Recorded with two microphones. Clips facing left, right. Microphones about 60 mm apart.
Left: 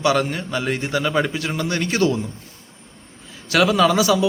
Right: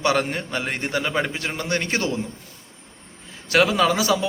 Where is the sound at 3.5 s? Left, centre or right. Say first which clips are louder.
Left 2 dB; right.